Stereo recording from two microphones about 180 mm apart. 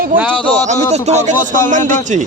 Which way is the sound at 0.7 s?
40° right (ahead or behind).